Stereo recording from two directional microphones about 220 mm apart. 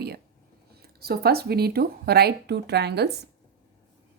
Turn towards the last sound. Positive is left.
turn(degrees=-50)  # may be behind; listen again after turning